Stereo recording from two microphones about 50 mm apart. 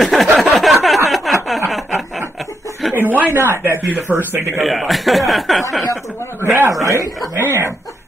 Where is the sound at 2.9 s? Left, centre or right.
Right.